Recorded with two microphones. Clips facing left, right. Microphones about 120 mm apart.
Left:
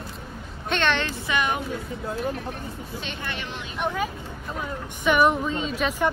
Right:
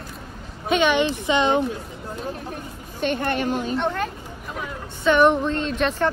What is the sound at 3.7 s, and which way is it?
Speech, 5° left (ahead or behind).